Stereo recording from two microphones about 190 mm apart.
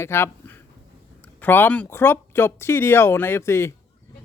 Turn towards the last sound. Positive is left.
turn(degrees=15)  # may be behind; listen again after turning